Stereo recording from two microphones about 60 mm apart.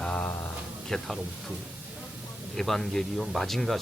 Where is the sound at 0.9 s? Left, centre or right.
Centre.